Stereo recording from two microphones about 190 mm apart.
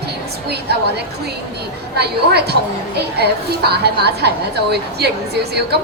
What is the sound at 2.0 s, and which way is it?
A woman's voice, 60° right (ahead or behind).